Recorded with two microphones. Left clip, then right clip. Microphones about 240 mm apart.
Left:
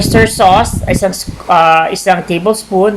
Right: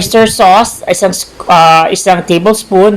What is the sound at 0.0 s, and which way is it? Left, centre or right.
Speech, right.